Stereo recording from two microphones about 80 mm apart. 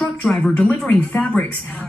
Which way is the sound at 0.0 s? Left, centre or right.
Centre.